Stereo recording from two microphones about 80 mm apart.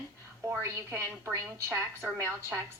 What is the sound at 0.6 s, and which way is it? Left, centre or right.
A woman's voice, right.